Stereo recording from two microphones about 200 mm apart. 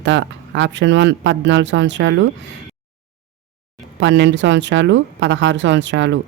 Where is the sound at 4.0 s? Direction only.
65° right (ahead or behind).